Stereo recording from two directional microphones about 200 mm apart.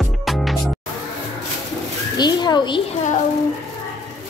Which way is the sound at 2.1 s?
20° left (ahead or behind).